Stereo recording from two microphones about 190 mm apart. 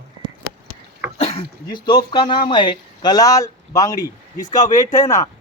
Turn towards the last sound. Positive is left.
turn(degrees=15)  # may be behind; listen again after turning